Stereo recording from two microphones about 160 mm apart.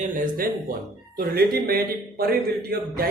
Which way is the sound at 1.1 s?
70° right (ahead or behind).